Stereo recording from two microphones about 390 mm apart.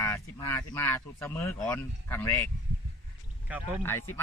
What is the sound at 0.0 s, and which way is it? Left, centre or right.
Speech, centre.